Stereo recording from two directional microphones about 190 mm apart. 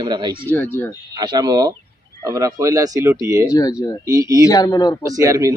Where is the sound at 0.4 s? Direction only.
10° left (ahead or behind).